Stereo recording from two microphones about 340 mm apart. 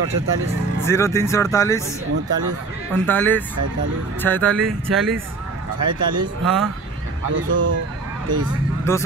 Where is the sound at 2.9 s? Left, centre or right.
Centre.